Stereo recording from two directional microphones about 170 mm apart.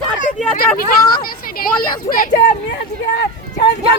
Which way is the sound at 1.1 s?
60° left (ahead or behind).